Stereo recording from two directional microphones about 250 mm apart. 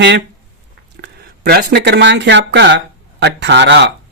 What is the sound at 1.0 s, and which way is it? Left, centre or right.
Speech, right.